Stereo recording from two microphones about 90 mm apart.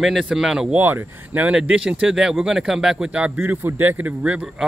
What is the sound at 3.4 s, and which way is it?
Speech, 25° right (ahead or behind).